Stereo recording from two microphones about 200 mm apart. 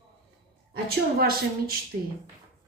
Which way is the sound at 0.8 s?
50° right (ahead or behind).